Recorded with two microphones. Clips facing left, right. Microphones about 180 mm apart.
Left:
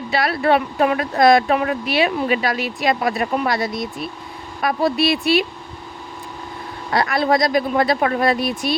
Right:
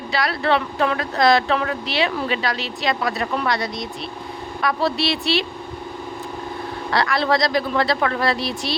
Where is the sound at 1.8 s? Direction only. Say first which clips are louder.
Left 4 dB; 25° right (ahead or behind).